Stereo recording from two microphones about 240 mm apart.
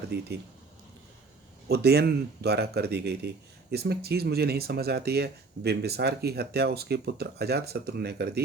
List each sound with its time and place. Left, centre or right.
0.1 s speech: right
1.6 s speech: right